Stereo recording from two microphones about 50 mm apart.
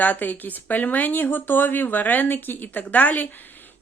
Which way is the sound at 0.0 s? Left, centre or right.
Left.